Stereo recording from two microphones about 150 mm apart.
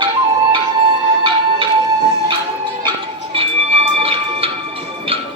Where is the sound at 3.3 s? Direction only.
40° right (ahead or behind).